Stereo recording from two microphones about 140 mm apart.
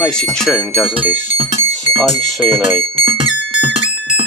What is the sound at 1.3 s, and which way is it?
Music, 40° right (ahead or behind).